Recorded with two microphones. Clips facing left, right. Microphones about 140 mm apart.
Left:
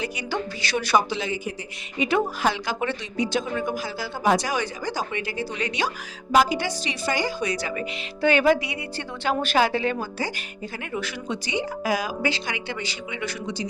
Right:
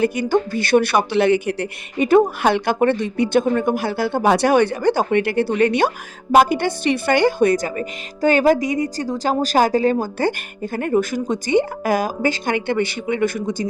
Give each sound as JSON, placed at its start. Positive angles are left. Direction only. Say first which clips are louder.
{"t": 0.0, "sound": "a woman's voice", "louder": "right 11 dB", "side_deg": -50}
{"t": 2.0, "sound": "a woman's voice", "louder": "right 9 dB", "side_deg": -50}